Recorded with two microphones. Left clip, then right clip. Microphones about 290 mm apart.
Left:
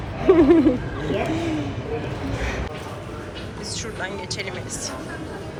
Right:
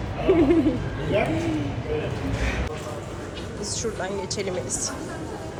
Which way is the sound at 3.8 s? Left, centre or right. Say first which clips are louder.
Right 2 dB; centre.